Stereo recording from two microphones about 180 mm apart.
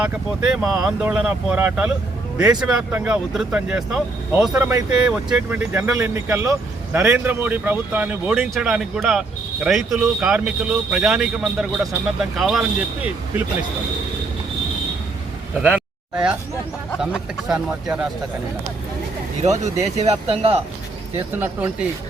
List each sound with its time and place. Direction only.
0.0 s speech: 5° right (ahead or behind)
17.0 s speech: 5° right (ahead or behind)
19.4 s speech: 40° right (ahead or behind)
21.3 s speech: 10° right (ahead or behind)